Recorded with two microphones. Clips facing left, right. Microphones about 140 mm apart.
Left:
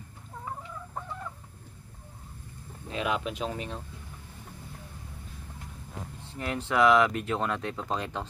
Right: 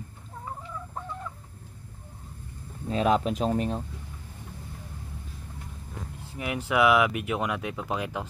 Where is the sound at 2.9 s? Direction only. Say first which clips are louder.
Right 7 dB; 35° right (ahead or behind).